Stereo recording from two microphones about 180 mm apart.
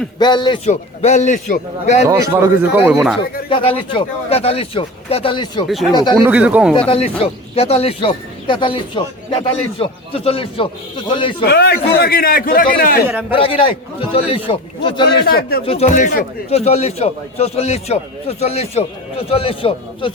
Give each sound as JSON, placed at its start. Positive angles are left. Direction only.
{"t": 0.2, "sound": "speech", "side_deg": 25}
{"t": 0.6, "sound": "speech", "side_deg": 40}
{"t": 2.0, "sound": "speech", "side_deg": -20}
{"t": 3.5, "sound": "speech", "side_deg": 30}
{"t": 5.6, "sound": "speech", "side_deg": 0}
{"t": 5.9, "sound": "speech", "side_deg": 25}
{"t": 6.1, "sound": "speech", "side_deg": -10}
{"t": 6.7, "sound": "speech", "side_deg": 30}
{"t": 11.4, "sound": "a man's voice", "side_deg": 65}
{"t": 13.3, "sound": "speech", "side_deg": 30}
{"t": 15.2, "sound": "a man's voice", "side_deg": 60}
{"t": 15.6, "sound": "speech", "side_deg": 35}